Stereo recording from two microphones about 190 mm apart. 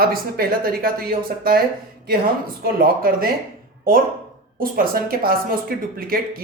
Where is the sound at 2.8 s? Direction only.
50° right (ahead or behind).